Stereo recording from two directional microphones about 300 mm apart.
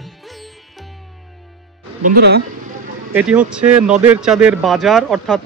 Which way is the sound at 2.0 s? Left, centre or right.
Right.